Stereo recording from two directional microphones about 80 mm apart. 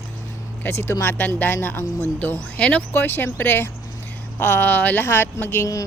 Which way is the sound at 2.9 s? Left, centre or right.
Left.